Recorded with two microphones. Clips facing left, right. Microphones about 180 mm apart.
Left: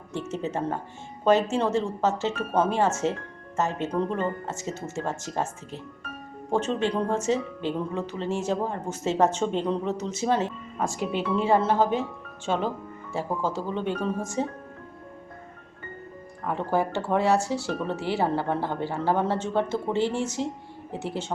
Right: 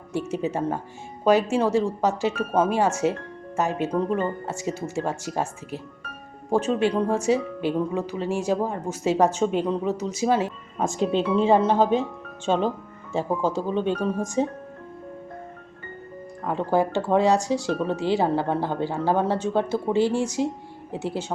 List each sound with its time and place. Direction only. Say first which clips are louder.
0.1 s speech: right 4 dB; 10° right (ahead or behind)
16.4 s speech: right 3 dB; 15° right (ahead or behind)